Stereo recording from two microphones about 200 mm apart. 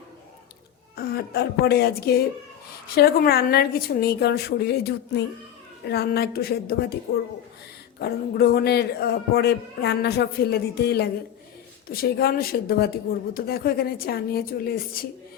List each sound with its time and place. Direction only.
0.9 s a man's voice: 50° left (ahead or behind)